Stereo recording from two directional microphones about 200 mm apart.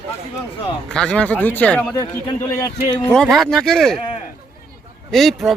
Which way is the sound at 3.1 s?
Centre (ahead or behind).